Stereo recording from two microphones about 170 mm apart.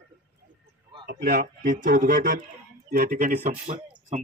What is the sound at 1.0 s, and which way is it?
A man's voice, 55° right (ahead or behind).